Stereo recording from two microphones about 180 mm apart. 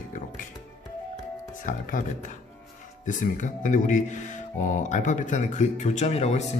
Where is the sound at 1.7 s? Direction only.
45° left (ahead or behind).